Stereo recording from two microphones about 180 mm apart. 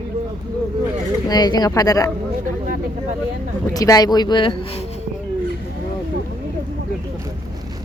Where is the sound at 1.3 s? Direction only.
20° left (ahead or behind).